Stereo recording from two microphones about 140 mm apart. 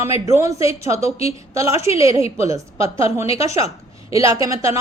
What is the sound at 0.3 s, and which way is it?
A woman's voice, 20° right (ahead or behind).